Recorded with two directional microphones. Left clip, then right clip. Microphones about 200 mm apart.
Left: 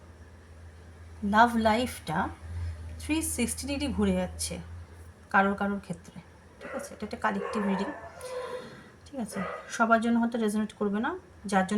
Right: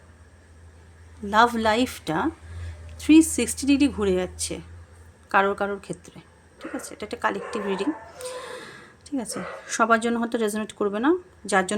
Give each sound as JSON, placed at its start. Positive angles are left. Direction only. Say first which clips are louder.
{"t": 1.3, "sound": "speech", "louder": "right 3 dB", "side_deg": -45}
{"t": 9.0, "sound": "speech", "louder": "right 4 dB", "side_deg": -50}